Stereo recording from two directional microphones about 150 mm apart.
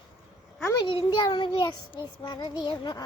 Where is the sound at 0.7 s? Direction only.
25° left (ahead or behind).